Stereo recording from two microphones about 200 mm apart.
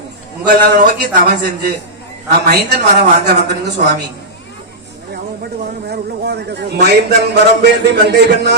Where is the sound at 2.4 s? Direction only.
55° right (ahead or behind).